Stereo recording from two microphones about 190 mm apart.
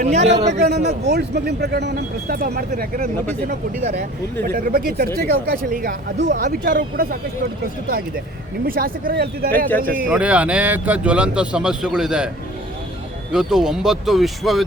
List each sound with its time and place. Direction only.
0.0 s a man's voice: 35° right (ahead or behind)
1.0 s speech: 60° right (ahead or behind)
10.1 s speech: 5° right (ahead or behind)
13.3 s speech: centre (ahead or behind)